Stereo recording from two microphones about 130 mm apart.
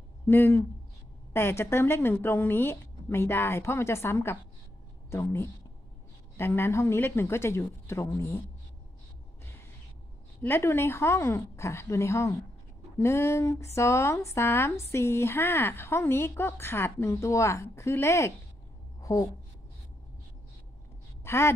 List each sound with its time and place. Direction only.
0.3 s speech: 20° left (ahead or behind)
10.4 s speech: 20° left (ahead or behind)
18.9 s a sound: 25° left (ahead or behind)
21.2 s a woman's voice: 20° left (ahead or behind)